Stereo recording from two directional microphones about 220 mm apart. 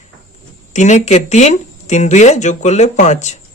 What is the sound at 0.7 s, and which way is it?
Speech, 35° left (ahead or behind).